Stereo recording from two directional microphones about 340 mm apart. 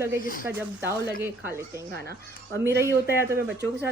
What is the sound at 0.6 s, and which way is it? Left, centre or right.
A woman's voice, centre.